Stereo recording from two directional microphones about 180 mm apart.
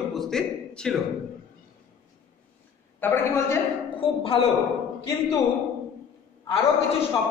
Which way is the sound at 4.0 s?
30° left (ahead or behind).